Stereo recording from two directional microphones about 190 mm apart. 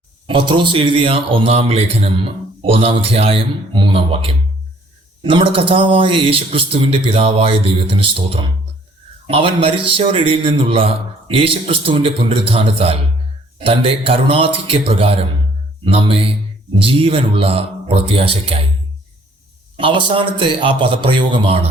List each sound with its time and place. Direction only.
0.3 s speech: 25° right (ahead or behind)
19.7 s speech: 25° right (ahead or behind)